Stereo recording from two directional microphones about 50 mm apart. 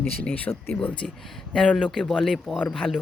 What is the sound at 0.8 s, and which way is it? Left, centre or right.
Speech, centre.